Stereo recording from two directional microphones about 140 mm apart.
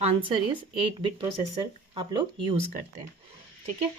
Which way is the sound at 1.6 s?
40° right (ahead or behind).